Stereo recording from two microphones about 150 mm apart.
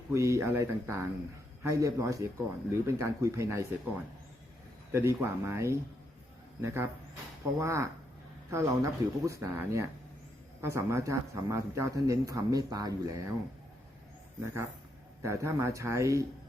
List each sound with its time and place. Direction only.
0.1 s speech: 20° right (ahead or behind)
14.4 s speech: 20° right (ahead or behind)